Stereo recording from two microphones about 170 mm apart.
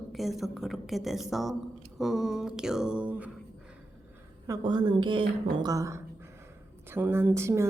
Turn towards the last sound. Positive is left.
turn(degrees=-15)  # may be behind; listen again after turning